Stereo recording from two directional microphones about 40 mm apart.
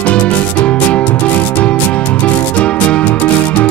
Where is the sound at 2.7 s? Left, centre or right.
Left.